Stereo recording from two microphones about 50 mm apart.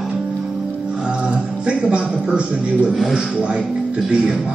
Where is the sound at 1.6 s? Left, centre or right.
Right.